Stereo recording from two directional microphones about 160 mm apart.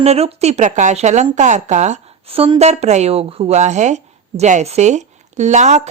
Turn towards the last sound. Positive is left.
turn(degrees=-45)  # may be behind; listen again after turning